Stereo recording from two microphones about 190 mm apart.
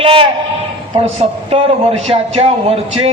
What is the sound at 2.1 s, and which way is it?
Speech, 30° right (ahead or behind).